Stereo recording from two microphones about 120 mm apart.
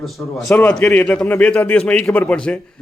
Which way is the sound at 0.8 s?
5° left (ahead or behind).